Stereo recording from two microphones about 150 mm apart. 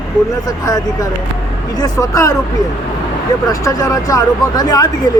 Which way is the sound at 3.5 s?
20° left (ahead or behind).